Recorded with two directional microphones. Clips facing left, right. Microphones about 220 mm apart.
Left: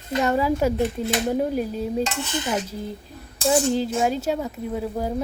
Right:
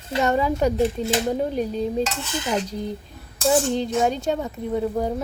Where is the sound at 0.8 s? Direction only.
30° right (ahead or behind).